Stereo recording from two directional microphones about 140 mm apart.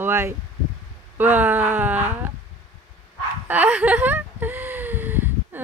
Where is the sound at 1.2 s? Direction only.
15° right (ahead or behind).